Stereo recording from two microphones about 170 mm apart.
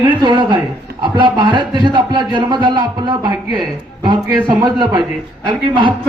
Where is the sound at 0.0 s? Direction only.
25° right (ahead or behind).